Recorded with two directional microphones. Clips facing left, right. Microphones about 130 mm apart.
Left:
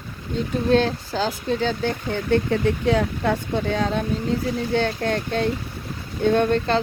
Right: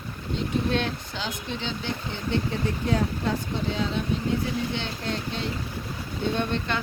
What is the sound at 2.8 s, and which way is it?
Speech, 85° left.